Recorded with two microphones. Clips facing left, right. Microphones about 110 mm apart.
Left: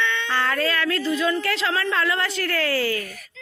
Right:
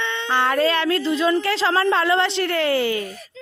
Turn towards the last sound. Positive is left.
turn(degrees=-20)  # may be behind; listen again after turning